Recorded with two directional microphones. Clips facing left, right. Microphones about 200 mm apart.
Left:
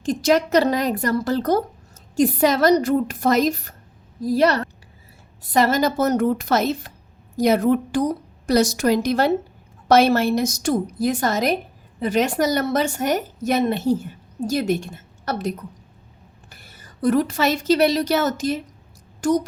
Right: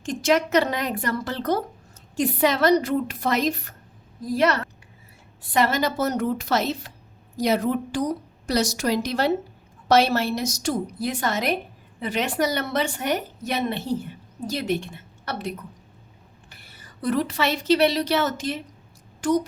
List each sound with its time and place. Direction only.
0.0 s a woman's voice: 35° left (ahead or behind)